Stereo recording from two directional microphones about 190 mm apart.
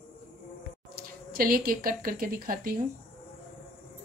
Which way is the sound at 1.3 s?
50° right (ahead or behind).